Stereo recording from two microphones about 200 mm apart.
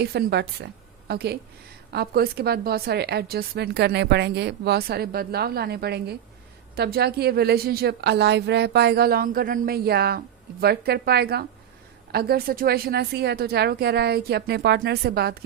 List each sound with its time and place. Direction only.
0.0 s a woman's voice: 55° right (ahead or behind)